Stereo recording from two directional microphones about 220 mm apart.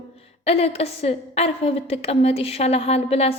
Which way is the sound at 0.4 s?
25° left (ahead or behind).